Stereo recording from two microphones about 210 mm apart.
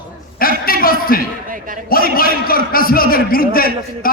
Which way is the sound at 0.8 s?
45° left (ahead or behind).